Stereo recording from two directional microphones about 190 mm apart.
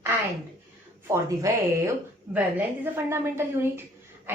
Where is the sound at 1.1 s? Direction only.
15° right (ahead or behind).